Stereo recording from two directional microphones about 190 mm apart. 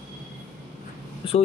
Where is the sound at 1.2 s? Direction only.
30° left (ahead or behind).